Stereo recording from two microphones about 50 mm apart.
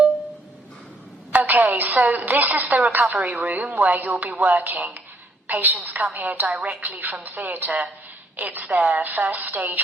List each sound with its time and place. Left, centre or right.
1.3 s a woman's voice: right